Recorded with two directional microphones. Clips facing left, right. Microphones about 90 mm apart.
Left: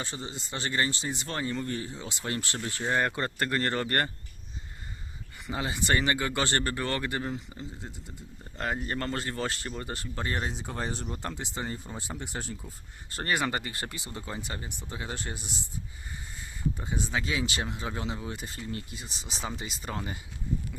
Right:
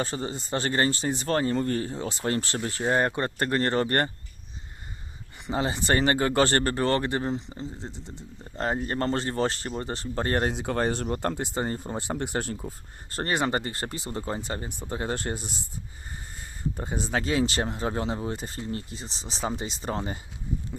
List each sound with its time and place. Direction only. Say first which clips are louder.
0.0 s speech: right 7 dB; 45° right (ahead or behind)
5.5 s speech: right 4 dB; 35° right (ahead or behind)
10.2 s speech: right 7 dB; 65° right (ahead or behind); by 15.6 s 40° right (ahead or behind)
16.7 s speech: right 7 dB; 40° right (ahead or behind)